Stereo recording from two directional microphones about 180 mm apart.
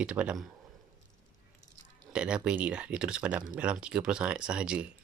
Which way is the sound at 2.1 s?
5° right (ahead or behind).